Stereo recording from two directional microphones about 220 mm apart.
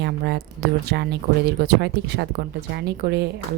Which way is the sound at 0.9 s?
50° right (ahead or behind).